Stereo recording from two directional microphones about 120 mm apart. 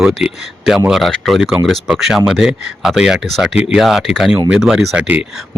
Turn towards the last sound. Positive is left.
turn(degrees=-5)  # may be behind; listen again after turning